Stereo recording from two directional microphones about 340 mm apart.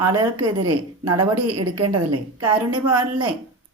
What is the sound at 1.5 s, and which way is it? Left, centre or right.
Speech, right.